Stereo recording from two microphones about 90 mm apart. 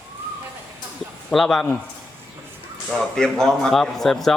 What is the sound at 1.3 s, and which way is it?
Speech, 5° left (ahead or behind).